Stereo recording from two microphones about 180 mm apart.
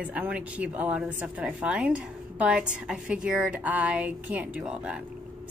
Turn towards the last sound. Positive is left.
turn(degrees=-5)  # may be behind; listen again after turning